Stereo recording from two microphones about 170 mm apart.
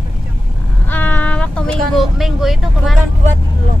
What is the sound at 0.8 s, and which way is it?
Vehicle, 10° left (ahead or behind).